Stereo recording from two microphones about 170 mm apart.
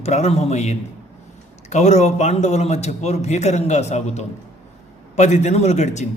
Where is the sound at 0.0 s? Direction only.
40° left (ahead or behind).